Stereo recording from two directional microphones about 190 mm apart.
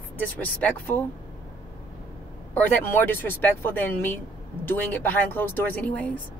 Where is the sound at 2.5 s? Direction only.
10° left (ahead or behind).